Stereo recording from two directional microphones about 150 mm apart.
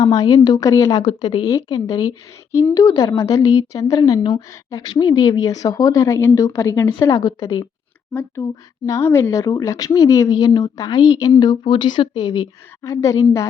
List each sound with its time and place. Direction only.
0.0 s speech: 25° left (ahead or behind)
8.4 s speech: 15° left (ahead or behind)